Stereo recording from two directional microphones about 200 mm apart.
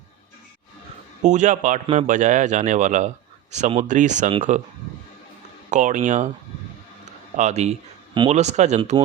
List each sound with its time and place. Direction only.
1.2 s a man's voice: 40° right (ahead or behind)
5.7 s a man's voice: 40° right (ahead or behind)
7.3 s a man's voice: 35° right (ahead or behind)